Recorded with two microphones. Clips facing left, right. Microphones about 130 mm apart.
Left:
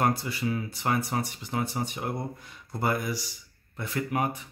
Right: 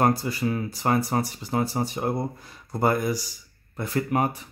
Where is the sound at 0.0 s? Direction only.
40° right (ahead or behind).